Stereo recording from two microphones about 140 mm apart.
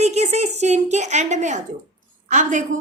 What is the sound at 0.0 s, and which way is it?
A woman's voice, 50° right (ahead or behind).